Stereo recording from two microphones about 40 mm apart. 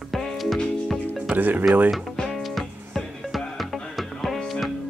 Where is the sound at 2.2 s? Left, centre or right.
Centre.